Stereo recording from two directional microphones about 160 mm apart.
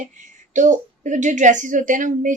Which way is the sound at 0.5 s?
50° right (ahead or behind).